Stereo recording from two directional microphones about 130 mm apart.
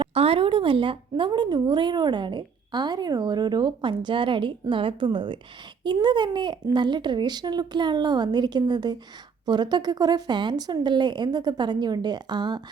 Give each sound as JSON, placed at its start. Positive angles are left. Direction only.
{"t": 0.1, "sound": "a woman's voice", "side_deg": -50}